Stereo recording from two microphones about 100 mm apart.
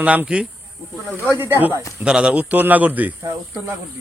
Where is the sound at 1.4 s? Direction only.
25° right (ahead or behind).